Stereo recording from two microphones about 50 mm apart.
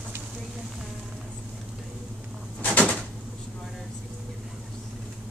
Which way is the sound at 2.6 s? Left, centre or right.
Left.